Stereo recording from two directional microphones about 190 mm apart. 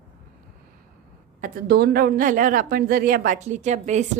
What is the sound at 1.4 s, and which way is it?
A woman's voice, 50° right (ahead or behind).